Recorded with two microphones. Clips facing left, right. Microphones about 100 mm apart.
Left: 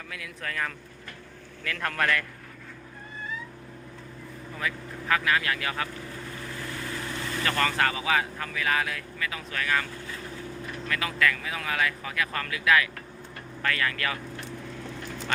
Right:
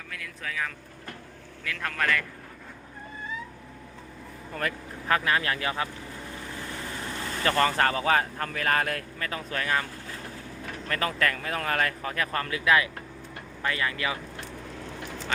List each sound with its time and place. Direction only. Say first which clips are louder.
0.1 s a man's voice: even; centre (ahead or behind)
5.0 s speech: even; 35° right (ahead or behind)
7.4 s speech: right 3 dB; 35° right (ahead or behind)
10.8 s speech: even; 40° right (ahead or behind); by 14.2 s 15° right (ahead or behind)